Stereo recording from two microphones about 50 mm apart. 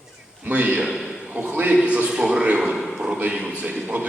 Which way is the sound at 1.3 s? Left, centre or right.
Right.